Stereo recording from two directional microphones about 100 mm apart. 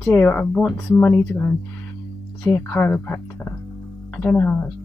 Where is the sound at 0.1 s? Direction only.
20° left (ahead or behind).